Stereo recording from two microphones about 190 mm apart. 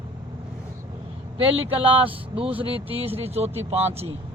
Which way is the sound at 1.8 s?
30° right (ahead or behind).